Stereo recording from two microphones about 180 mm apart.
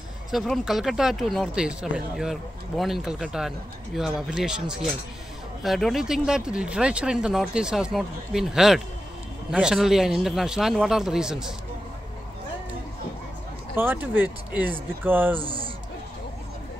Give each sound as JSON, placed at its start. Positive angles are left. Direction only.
{"t": 0.3, "sound": "speech", "side_deg": 0}
{"t": 13.7, "sound": "speech", "side_deg": -10}
{"t": 15.4, "sound": "a sound", "side_deg": -30}